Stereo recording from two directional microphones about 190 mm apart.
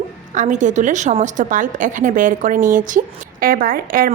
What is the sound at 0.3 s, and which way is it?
A woman's voice, 40° right (ahead or behind).